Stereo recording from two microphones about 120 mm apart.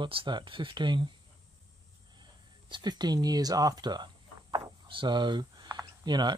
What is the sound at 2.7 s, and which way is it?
Speech, 35° right (ahead or behind).